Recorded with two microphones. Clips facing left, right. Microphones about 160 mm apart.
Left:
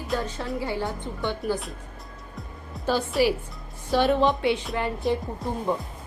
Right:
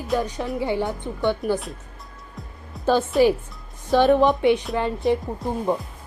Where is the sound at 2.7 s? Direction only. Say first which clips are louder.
Right 5 dB; centre (ahead or behind).